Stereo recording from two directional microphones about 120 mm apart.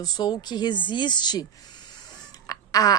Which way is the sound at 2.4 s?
30° left (ahead or behind).